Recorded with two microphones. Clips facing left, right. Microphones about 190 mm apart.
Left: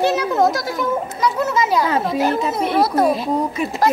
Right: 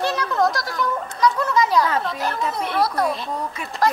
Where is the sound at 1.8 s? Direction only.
25° left (ahead or behind).